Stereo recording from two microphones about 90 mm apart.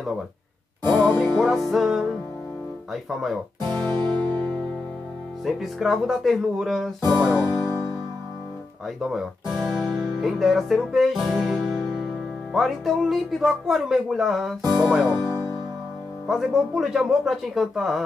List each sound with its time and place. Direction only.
0.9 s speech: centre (ahead or behind)
3.6 s music: 25° left (ahead or behind)
3.9 s music: 55° right (ahead or behind)
5.4 s speech: centre (ahead or behind)
9.1 s speech: centre (ahead or behind)
16.3 s speech: 5° right (ahead or behind)